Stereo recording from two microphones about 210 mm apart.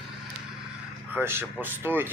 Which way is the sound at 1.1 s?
10° right (ahead or behind).